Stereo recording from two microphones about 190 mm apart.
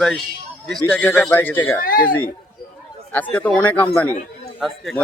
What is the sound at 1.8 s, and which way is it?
Speech, 50° left (ahead or behind).